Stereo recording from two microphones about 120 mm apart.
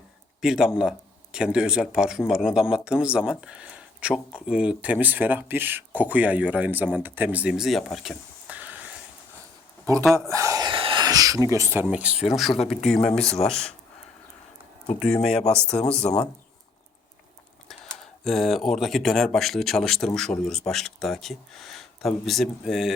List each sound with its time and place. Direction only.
0.4 s speech: 5° right (ahead or behind)
8.5 s a sound: 15° right (ahead or behind)
10.0 s speech: 5° left (ahead or behind)
10.2 s speech: 25° right (ahead or behind)
10.7 s a sound: 45° right (ahead or behind)
11.0 s speech: 30° right (ahead or behind)
11.9 s speech: 10° right (ahead or behind)
12.6 s speech: 5° left (ahead or behind)
14.9 s speech: 5° left (ahead or behind)
17.7 s speech: 5° left (ahead or behind)